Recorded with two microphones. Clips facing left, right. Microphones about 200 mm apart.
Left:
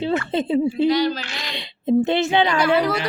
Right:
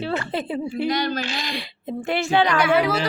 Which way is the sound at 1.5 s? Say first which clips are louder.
Left 11 dB; 20° left (ahead or behind).